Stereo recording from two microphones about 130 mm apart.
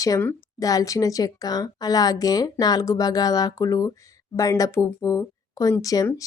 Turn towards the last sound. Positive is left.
turn(degrees=25)  # may be behind; listen again after turning